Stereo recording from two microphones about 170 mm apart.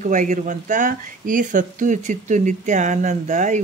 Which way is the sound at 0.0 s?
50° right (ahead or behind).